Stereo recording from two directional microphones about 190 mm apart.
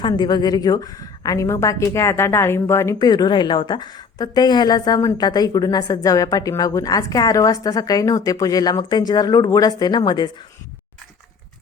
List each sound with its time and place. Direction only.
0.0 s a woman's voice: 25° left (ahead or behind)